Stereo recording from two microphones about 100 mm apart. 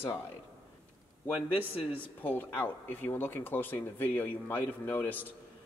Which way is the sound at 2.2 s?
20° left (ahead or behind).